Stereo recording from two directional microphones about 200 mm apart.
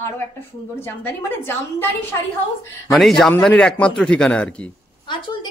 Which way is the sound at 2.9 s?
Centre (ahead or behind).